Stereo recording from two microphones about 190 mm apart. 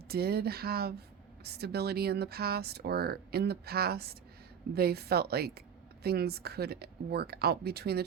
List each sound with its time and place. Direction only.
0.1 s a woman's voice: 55° right (ahead or behind)